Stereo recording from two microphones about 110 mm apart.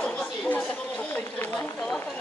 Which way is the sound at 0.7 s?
10° left (ahead or behind).